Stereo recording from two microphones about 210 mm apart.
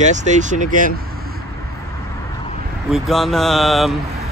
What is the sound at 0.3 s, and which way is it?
Speech, 35° right (ahead or behind).